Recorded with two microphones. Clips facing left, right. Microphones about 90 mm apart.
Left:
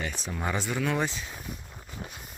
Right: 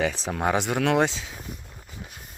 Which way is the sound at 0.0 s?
85° right.